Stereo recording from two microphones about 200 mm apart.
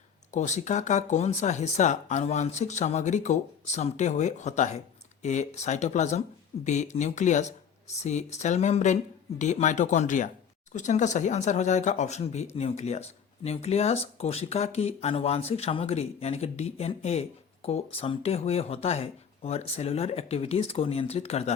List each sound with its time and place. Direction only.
0.3 s speech: 35° left (ahead or behind)